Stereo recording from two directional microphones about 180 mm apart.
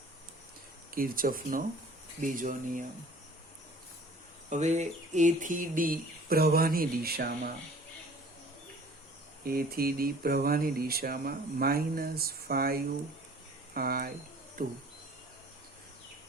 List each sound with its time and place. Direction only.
0.9 s speech: 50° right (ahead or behind)
4.4 s speech: 40° right (ahead or behind); by 7.5 s 60° right (ahead or behind)
9.4 s speech: 55° right (ahead or behind)